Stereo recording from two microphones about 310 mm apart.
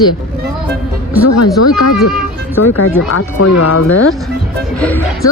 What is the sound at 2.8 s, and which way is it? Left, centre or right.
Speech, left.